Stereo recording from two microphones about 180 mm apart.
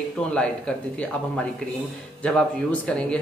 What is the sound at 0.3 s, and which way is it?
Speech, 5° left (ahead or behind).